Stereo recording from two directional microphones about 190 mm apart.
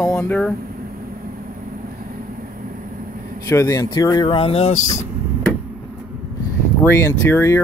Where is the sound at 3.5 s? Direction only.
15° left (ahead or behind); by 4.8 s 30° left (ahead or behind).